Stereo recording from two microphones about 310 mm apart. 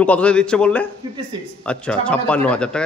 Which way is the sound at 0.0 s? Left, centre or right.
Centre.